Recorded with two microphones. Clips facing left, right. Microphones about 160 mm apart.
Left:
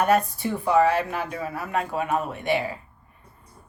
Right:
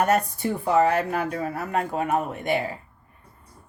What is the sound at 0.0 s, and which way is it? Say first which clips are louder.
Speech: left 1 dB; 45° right (ahead or behind).